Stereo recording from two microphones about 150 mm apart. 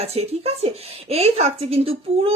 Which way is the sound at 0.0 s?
40° right (ahead or behind).